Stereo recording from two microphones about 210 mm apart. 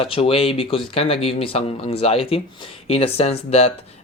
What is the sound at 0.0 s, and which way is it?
Speech, 25° left (ahead or behind).